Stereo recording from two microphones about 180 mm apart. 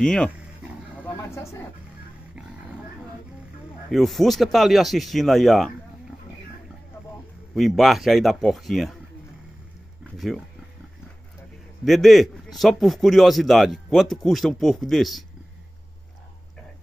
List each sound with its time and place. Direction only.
0.0 s speech: 5° left (ahead or behind)
1.0 s vehicle: 15° left (ahead or behind)
3.9 s speech: centre (ahead or behind)
7.5 s speech: centre (ahead or behind)
10.1 s speech: centre (ahead or behind)
11.8 s speech: centre (ahead or behind)